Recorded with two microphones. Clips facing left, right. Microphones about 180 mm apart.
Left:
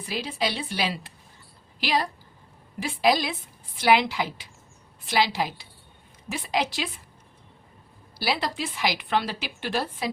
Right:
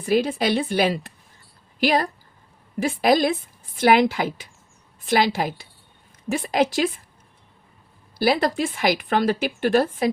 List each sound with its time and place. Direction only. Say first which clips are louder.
0.0 s speech: right 9 dB; 50° right (ahead or behind)
8.2 s speech: right 8 dB; 50° right (ahead or behind)